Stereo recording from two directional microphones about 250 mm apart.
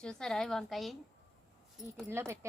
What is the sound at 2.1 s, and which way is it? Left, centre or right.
Speech, centre.